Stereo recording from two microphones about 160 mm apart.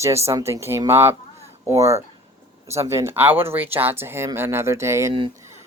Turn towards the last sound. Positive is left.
turn(degrees=-15)  # may be behind; listen again after turning